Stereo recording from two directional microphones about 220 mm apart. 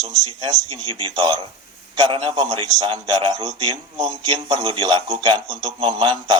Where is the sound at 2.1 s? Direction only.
20° right (ahead or behind).